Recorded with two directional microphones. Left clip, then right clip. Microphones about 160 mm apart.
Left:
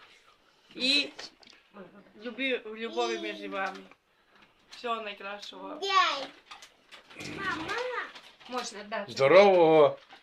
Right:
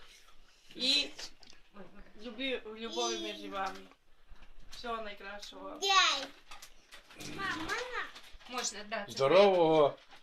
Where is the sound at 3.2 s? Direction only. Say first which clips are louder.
Left 4 dB; 5° left (ahead or behind).